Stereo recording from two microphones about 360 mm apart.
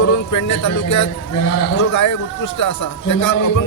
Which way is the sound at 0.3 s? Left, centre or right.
Left.